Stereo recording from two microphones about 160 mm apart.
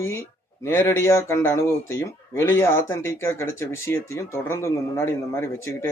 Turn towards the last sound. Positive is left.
turn(degrees=15)  # may be behind; listen again after turning